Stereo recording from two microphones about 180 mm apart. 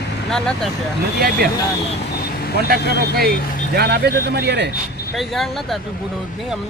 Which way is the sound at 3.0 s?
60° right (ahead or behind).